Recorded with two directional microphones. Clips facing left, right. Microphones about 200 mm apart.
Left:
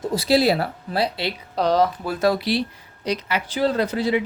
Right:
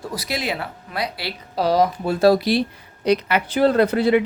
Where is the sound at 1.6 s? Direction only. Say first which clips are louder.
Right 1 dB; 10° right (ahead or behind).